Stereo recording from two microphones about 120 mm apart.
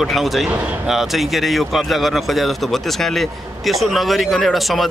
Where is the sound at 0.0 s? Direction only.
Centre (ahead or behind).